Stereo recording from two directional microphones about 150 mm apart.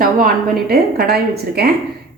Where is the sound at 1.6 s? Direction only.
90° right.